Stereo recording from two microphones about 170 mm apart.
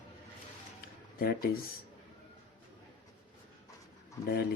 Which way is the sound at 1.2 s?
60° left (ahead or behind).